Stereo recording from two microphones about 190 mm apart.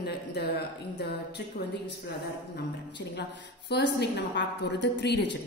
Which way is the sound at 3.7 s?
65° left (ahead or behind).